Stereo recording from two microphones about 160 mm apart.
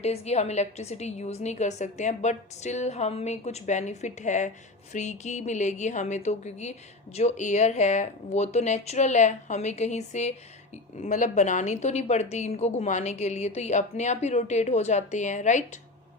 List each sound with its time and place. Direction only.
0.0 s a woman's voice: 40° left (ahead or behind)